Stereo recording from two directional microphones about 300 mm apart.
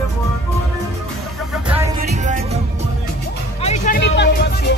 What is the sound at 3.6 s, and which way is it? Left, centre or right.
Music, left.